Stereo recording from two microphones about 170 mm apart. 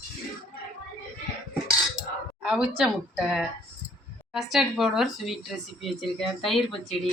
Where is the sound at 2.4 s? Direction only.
5° right (ahead or behind).